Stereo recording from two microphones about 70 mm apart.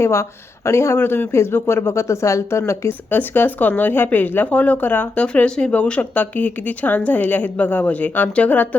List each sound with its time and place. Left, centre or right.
0.0 s speech: left
3.1 s speech: left